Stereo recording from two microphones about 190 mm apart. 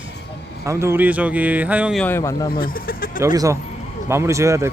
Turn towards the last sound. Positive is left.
turn(degrees=-15)  # may be behind; listen again after turning